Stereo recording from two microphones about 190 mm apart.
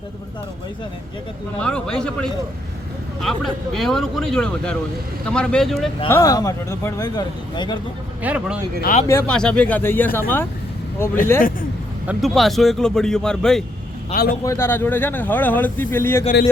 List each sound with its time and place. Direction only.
1.5 s speech: 5° left (ahead or behind)
6.1 s speech: 15° left (ahead or behind)
8.2 s speech: 10° right (ahead or behind)
8.8 s speech: 45° left (ahead or behind)
9.0 s speech: 10° left (ahead or behind)
12.0 s speech: centre (ahead or behind)
14.4 s speech: 15° left (ahead or behind)